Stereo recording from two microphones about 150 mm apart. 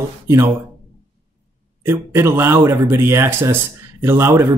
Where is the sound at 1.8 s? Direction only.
15° right (ahead or behind).